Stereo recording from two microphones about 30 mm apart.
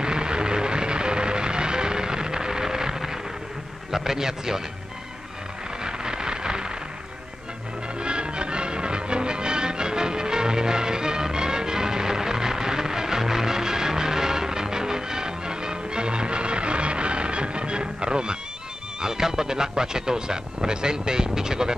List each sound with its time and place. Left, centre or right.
0.0 s vehicle: right
3.9 s a man's voice: centre
5.9 s a sound: right
8.0 s music: right